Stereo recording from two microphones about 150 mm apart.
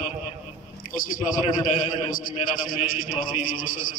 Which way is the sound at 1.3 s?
60° left (ahead or behind).